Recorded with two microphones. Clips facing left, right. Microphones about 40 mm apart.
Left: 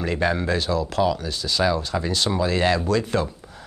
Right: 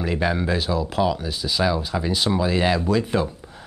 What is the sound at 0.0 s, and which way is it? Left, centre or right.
Speech, centre.